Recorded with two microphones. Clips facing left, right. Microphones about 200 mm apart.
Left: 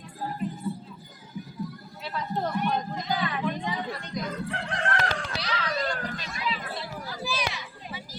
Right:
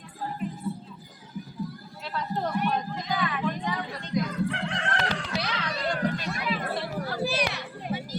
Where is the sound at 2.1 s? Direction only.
Centre (ahead or behind).